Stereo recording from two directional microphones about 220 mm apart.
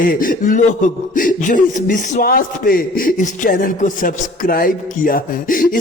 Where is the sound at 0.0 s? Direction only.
40° left (ahead or behind).